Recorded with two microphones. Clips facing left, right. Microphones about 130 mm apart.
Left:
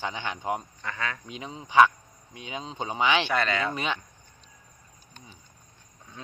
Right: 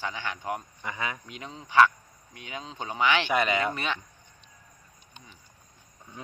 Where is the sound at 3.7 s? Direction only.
15° left (ahead or behind).